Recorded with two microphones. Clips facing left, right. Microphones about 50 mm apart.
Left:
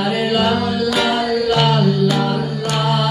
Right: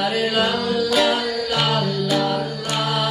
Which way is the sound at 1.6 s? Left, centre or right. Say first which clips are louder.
Left 6 dB; centre.